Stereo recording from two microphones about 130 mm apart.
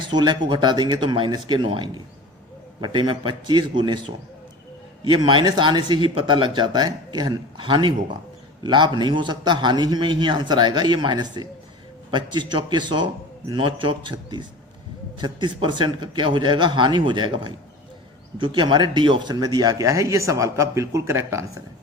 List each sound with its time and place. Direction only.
0.1 s speech: 35° right (ahead or behind)